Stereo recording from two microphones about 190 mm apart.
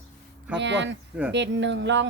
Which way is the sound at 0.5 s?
70° right (ahead or behind).